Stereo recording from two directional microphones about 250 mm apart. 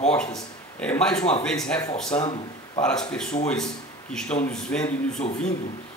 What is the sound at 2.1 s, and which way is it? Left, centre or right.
Speech, centre.